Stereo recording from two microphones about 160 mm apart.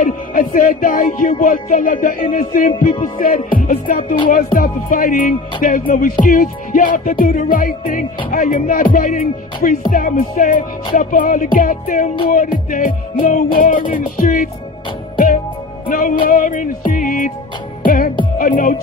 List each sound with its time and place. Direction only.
0.0 s speech: 60° left (ahead or behind)
1.3 s music: 55° left (ahead or behind)